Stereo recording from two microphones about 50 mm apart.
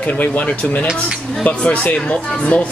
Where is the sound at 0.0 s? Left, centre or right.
Left.